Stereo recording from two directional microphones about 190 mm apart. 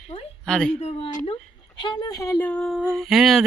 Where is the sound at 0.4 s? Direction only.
5° left (ahead or behind).